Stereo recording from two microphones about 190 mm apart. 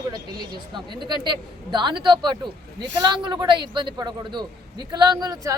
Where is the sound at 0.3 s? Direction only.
25° right (ahead or behind).